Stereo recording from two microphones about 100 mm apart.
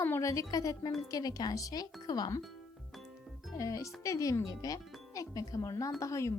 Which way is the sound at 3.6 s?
35° left (ahead or behind).